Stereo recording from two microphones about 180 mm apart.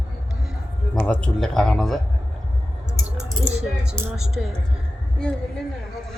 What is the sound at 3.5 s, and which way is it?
Speech, 5° right (ahead or behind).